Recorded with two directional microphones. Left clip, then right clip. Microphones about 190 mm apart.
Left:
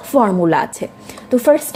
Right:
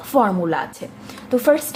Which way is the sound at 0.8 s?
35° left (ahead or behind).